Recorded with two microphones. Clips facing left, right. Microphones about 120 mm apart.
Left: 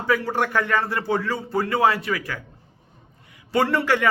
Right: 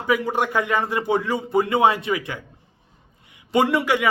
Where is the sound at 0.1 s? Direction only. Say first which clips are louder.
Right 1 dB; 15° right (ahead or behind).